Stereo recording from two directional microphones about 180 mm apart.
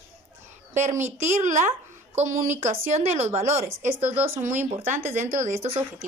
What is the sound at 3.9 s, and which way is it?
Speech, 10° right (ahead or behind).